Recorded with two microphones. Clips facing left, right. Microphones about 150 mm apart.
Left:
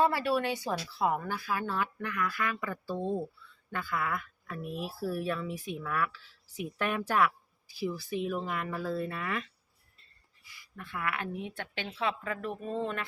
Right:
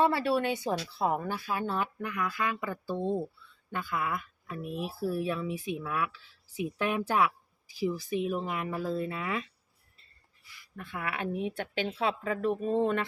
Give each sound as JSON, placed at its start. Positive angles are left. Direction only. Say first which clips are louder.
{"t": 0.0, "sound": "speech", "louder": "right 1 dB", "side_deg": -25}
{"t": 10.9, "sound": "speech", "louder": "right 2 dB", "side_deg": -20}
{"t": 12.6, "sound": "speech", "louder": "right 6 dB", "side_deg": -20}